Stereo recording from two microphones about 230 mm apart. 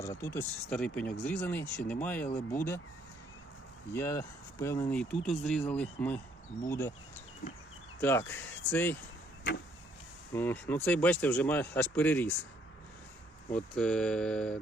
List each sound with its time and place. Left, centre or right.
0.0 s speech: centre
3.9 s speech: centre
7.4 s speech: left
8.0 s speech: centre
10.3 s speech: centre
13.5 s speech: centre